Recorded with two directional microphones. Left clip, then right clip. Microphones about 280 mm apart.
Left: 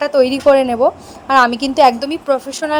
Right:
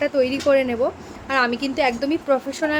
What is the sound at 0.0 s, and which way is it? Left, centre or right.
Speech, centre.